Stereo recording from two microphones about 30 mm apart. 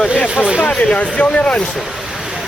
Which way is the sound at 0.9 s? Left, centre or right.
Left.